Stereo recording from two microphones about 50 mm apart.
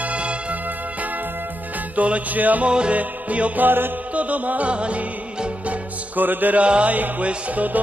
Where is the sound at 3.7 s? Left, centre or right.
Right.